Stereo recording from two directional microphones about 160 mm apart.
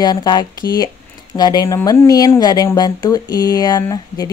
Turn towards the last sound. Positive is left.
turn(degrees=20)  # may be behind; listen again after turning